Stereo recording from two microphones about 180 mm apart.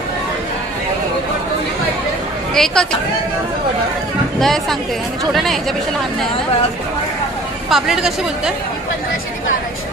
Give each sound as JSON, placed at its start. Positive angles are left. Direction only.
{"t": 2.5, "sound": "a woman's voice", "side_deg": 5}
{"t": 4.4, "sound": "a woman's voice", "side_deg": 0}
{"t": 7.7, "sound": "a woman's voice", "side_deg": 0}